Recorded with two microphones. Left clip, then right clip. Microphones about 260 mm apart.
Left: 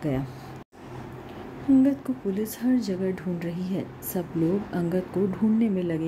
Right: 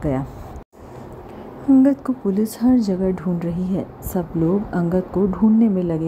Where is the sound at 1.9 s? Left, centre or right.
Centre.